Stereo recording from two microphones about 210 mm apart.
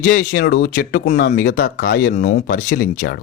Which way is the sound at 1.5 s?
60° left (ahead or behind).